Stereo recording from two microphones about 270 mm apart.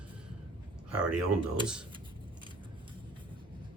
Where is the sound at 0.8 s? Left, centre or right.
Right.